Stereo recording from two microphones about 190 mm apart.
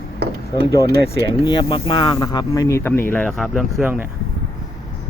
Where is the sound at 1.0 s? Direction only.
20° left (ahead or behind); by 4.0 s 5° right (ahead or behind).